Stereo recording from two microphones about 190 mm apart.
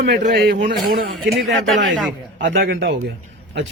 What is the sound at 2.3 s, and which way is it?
Speech, 70° right (ahead or behind).